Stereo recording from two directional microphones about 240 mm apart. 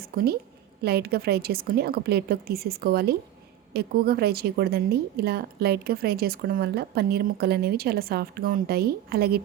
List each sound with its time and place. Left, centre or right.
0.1 s a woman's voice: right